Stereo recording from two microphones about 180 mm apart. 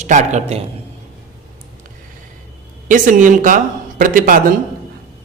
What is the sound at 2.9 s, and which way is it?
A man's voice, 45° right (ahead or behind).